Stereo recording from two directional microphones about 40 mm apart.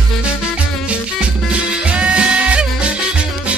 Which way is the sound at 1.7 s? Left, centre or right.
Right.